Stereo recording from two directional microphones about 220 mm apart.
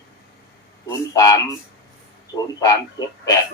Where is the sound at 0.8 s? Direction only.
15° left (ahead or behind).